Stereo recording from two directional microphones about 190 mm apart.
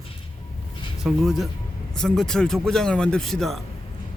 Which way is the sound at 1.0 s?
Centre (ahead or behind).